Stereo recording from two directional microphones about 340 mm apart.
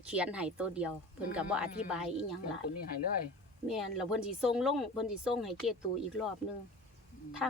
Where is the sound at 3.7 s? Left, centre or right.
Centre.